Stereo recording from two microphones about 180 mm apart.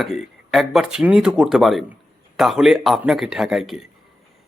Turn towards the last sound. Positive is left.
turn(degrees=0)  # may be behind; listen again after turning